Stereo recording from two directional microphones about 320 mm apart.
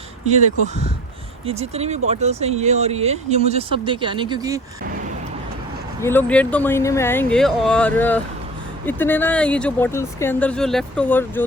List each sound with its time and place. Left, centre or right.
0.3 s speech: right
6.0 s speech: centre